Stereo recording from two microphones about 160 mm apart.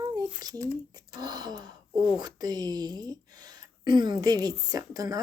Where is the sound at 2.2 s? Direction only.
25° right (ahead or behind).